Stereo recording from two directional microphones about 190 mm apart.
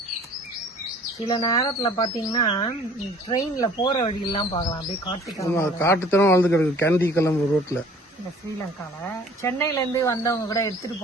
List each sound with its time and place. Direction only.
1.3 s speech: 20° left (ahead or behind)
8.8 s speech: 15° left (ahead or behind)